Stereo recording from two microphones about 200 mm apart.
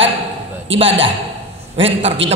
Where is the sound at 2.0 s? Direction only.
65° right (ahead or behind).